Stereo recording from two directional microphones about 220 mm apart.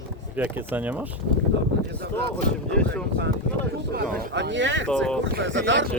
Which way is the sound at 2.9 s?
50° right (ahead or behind).